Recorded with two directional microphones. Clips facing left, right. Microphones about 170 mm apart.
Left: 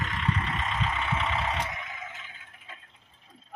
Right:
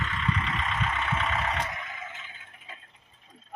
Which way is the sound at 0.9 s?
10° left (ahead or behind).